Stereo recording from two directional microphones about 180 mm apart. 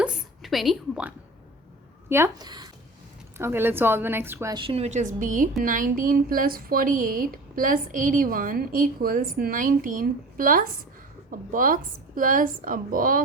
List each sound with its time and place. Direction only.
0.0 s a sound: 5° right (ahead or behind)
2.0 s a woman's voice: 15° right (ahead or behind)
4.5 s a woman's voice: 30° right (ahead or behind); by 13.2 s 50° right (ahead or behind)